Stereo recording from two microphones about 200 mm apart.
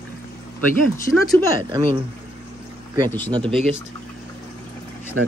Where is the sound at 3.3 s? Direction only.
20° right (ahead or behind).